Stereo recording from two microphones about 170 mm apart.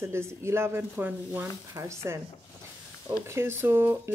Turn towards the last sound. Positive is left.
turn(degrees=-15)  # may be behind; listen again after turning